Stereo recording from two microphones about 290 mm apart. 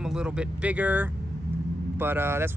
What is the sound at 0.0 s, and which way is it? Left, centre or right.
Speech, centre.